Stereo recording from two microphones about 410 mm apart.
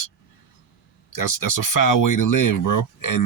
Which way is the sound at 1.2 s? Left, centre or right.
Left.